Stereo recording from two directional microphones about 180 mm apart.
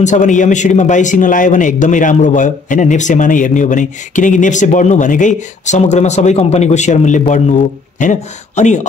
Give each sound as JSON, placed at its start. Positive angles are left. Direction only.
{"t": 0.0, "sound": "a man's voice", "side_deg": 45}